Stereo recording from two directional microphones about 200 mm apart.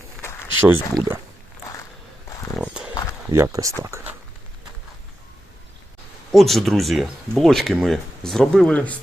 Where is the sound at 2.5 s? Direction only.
5° right (ahead or behind).